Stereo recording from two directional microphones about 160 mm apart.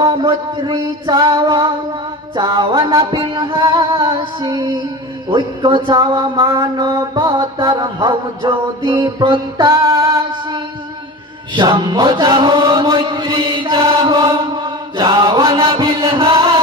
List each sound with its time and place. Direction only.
0.0 s chant: 25° right (ahead or behind)
11.5 s chant: 30° right (ahead or behind)